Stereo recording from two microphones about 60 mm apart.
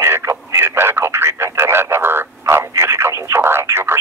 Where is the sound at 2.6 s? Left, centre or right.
Right.